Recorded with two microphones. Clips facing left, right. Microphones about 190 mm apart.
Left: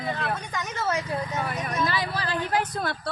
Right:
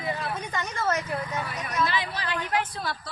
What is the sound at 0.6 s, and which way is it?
Speech, 5° left (ahead or behind).